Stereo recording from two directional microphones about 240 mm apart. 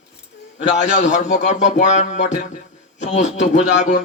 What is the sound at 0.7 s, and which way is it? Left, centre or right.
A man's voice, left.